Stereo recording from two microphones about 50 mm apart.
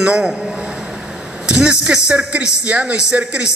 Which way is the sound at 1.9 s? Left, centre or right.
Centre.